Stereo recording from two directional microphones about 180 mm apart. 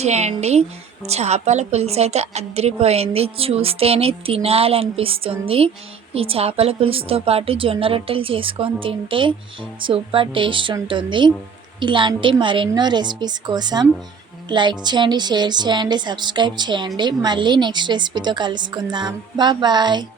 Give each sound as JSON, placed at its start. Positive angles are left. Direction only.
{"t": 0.0, "sound": "a woman's voice", "side_deg": -40}